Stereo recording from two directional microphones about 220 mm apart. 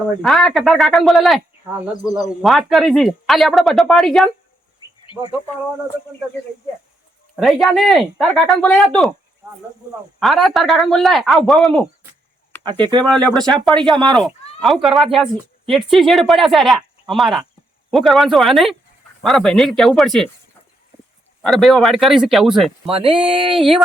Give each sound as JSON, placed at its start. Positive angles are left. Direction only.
{"t": 0.2, "sound": "speech", "side_deg": 0}
{"t": 7.3, "sound": "speech", "side_deg": 0}
{"t": 10.2, "sound": "speech", "side_deg": 0}
{"t": 12.6, "sound": "speech", "side_deg": -20}
{"t": 13.1, "sound": "speech", "side_deg": 5}
{"t": 13.9, "sound": "speech", "side_deg": -20}
{"t": 14.2, "sound": "speech", "side_deg": 0}
{"t": 21.4, "sound": "speech", "side_deg": 0}
{"t": 22.9, "sound": "speech", "side_deg": -25}